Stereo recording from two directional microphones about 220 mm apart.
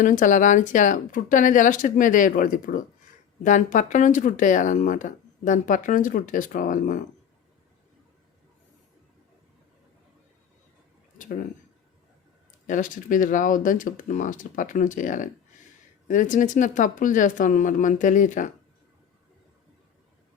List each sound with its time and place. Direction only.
0.0 s speech: 35° left (ahead or behind)
11.2 s speech: 40° left (ahead or behind)
12.6 s speech: 35° left (ahead or behind)